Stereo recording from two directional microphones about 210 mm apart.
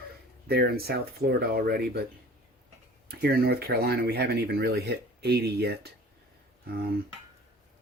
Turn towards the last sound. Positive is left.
turn(degrees=-50)  # may be behind; listen again after turning